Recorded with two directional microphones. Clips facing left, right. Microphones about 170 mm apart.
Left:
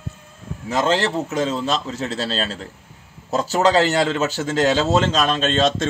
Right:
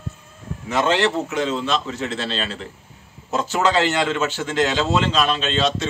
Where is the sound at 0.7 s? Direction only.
35° left (ahead or behind).